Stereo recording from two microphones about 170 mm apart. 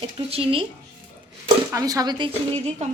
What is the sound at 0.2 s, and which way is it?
Speech, 35° right (ahead or behind).